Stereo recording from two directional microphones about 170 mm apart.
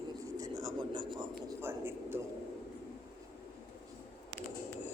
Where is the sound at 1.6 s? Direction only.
15° right (ahead or behind).